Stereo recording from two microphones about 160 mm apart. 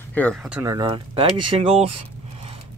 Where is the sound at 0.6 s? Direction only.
25° right (ahead or behind).